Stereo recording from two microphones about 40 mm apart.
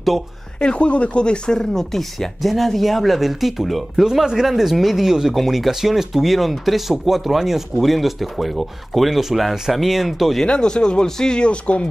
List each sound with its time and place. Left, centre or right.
0.6 s speech: left; by 10.4 s centre
10.4 s speech: left